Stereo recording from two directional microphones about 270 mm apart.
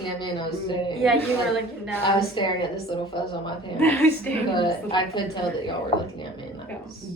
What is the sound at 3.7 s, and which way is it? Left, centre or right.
Speech, centre.